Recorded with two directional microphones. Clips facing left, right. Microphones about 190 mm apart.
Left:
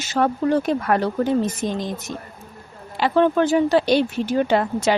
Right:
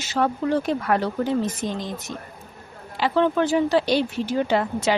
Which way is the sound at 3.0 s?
50° left (ahead or behind).